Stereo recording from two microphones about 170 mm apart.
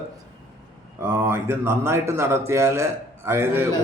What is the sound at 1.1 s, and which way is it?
A man's voice, 15° right (ahead or behind).